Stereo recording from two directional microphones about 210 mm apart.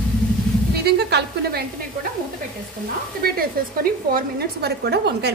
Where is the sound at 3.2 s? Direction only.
45° right (ahead or behind).